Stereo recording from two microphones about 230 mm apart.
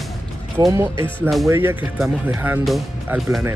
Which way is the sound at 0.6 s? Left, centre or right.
Centre.